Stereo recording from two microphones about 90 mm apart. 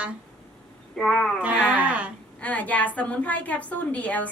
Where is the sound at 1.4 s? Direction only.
15° right (ahead or behind).